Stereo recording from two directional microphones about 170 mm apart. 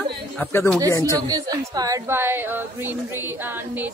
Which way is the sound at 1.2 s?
25° right (ahead or behind).